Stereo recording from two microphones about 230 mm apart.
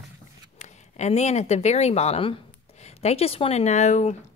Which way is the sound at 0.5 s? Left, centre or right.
Left.